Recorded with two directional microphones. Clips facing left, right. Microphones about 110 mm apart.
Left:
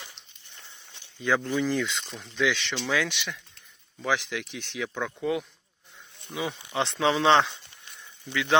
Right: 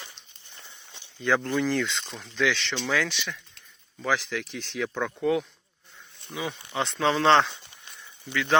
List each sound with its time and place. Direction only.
1.2 s speech: 5° left (ahead or behind)
6.7 s speech: 25° left (ahead or behind)
7.1 s speech: 15° left (ahead or behind)